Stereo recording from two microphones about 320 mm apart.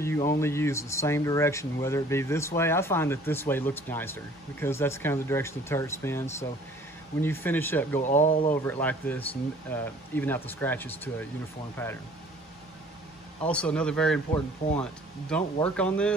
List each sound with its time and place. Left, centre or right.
0.4 s speech: centre
8.0 s speech: left
8.8 s speech: centre
13.4 s speech: centre